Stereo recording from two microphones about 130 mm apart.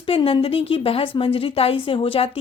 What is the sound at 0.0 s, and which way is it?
A woman's voice, 45° left (ahead or behind).